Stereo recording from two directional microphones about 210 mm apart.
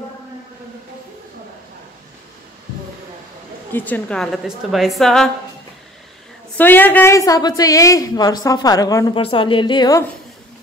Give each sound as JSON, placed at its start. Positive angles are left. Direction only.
{"t": 3.7, "sound": "a woman's voice", "side_deg": 10}
{"t": 6.5, "sound": "a woman's voice", "side_deg": 10}